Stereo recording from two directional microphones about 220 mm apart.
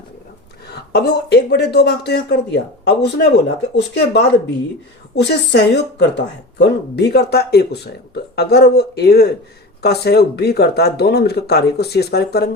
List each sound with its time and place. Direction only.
0.7 s speech: 50° left (ahead or behind)